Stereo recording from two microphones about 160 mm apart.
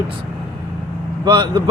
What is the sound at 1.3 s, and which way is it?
Speech, 30° right (ahead or behind).